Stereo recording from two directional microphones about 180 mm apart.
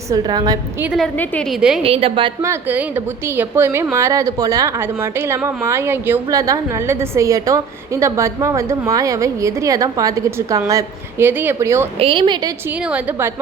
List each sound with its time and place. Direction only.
0.1 s a woman's voice: 20° right (ahead or behind)
0.9 s a woman's voice: centre (ahead or behind)
1.8 s a woman's voice: 30° right (ahead or behind)
2.4 s a woman's voice: 15° right (ahead or behind)
11.9 s a woman's voice: 30° right (ahead or behind)
12.6 s a woman's voice: 5° right (ahead or behind)